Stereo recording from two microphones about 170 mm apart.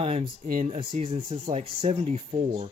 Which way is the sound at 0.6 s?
40° right (ahead or behind).